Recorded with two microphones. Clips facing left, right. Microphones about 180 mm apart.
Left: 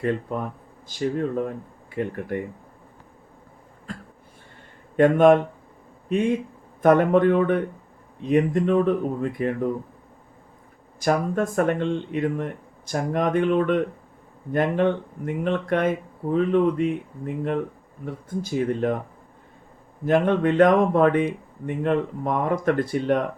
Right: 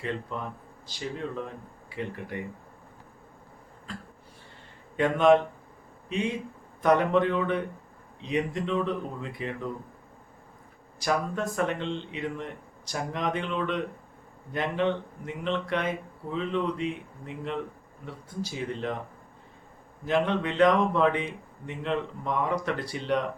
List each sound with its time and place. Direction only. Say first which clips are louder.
0.0 s speech: left 8 dB; 50° left (ahead or behind)
3.9 s a sound: left 4 dB; 50° left (ahead or behind)
4.9 s a man's voice: left 5 dB; 50° left (ahead or behind)
11.0 s speech: left 6 dB; 50° left (ahead or behind)
20.1 s speech: left 7 dB; 50° left (ahead or behind)